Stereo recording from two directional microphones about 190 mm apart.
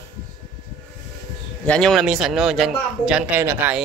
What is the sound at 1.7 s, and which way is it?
A man's voice, centre (ahead or behind).